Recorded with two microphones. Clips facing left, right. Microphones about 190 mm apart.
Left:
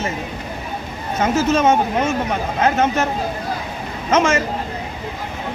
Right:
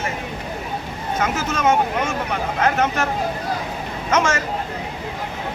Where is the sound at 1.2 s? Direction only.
25° left (ahead or behind).